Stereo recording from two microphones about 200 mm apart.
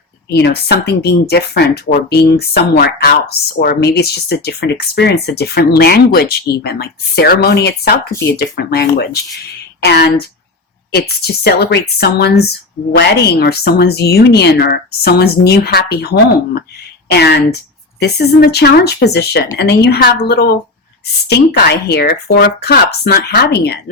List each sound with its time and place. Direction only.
0.3 s speech: 55° left (ahead or behind)